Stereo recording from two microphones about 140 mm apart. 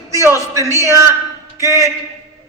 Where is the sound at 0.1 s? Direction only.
20° right (ahead or behind).